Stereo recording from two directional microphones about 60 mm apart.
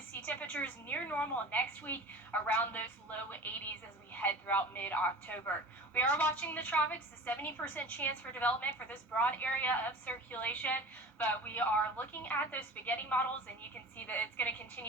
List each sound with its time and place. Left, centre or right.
0.1 s a woman's voice: left